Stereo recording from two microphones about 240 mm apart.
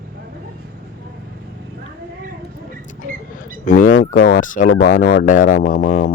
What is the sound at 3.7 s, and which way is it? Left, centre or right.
Speech, left.